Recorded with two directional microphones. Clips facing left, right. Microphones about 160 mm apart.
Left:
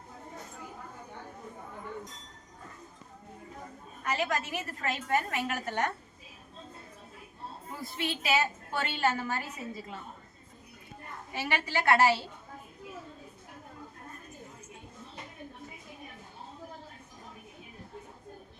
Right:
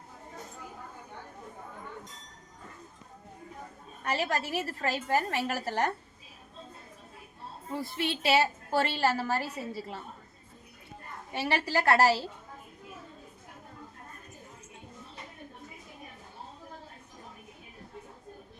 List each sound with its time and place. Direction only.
4.0 s a woman's voice: 35° right (ahead or behind)
7.8 s a woman's voice: 30° right (ahead or behind)
11.3 s a woman's voice: 35° right (ahead or behind)